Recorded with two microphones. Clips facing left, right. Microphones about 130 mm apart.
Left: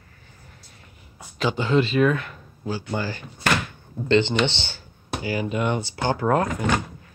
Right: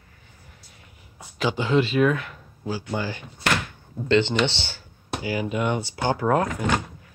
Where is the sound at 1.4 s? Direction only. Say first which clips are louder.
Left 1 dB; 10° right (ahead or behind).